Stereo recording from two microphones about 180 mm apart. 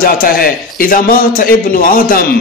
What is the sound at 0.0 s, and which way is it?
A man's voice, 55° left (ahead or behind).